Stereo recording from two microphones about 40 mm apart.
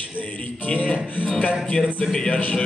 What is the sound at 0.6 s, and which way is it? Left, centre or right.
Music, left.